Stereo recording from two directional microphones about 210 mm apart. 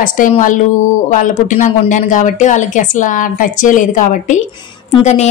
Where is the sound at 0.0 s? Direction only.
40° left (ahead or behind).